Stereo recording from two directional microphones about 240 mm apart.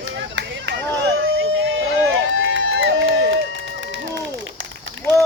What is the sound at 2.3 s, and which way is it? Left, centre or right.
Run, right.